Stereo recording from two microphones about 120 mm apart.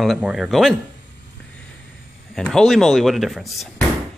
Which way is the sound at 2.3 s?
5° left (ahead or behind).